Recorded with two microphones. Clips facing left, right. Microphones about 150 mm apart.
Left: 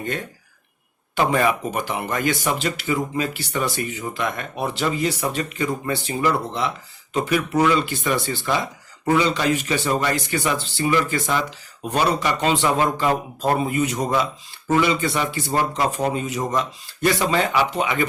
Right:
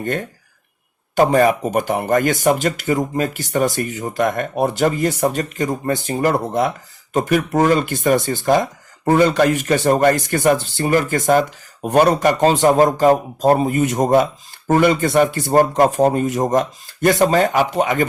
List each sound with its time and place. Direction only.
0.0 s speech: 50° right (ahead or behind)